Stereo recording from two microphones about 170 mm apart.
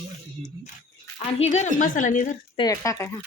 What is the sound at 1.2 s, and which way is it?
A woman's voice, 40° left (ahead or behind).